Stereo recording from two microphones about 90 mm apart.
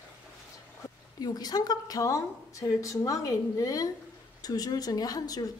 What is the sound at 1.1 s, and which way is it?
A woman's voice, 45° left (ahead or behind).